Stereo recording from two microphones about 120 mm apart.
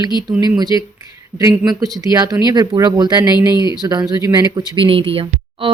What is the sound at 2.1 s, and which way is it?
Speech, 35° right (ahead or behind).